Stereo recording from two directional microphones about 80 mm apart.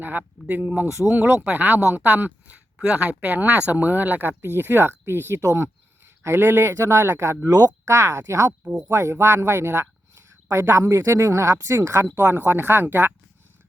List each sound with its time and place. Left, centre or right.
0.0 s speech: right
0.9 s speech: right
1.1 s speech: right
7.4 s speech: right
7.9 s speech: right
8.6 s speech: centre
8.9 s speech: right
12.4 s speech: right